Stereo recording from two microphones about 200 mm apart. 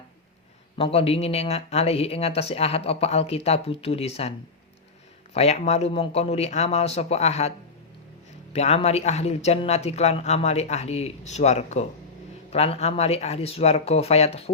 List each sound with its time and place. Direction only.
0.8 s speech: 30° left (ahead or behind)
8.5 s speech: 30° left (ahead or behind)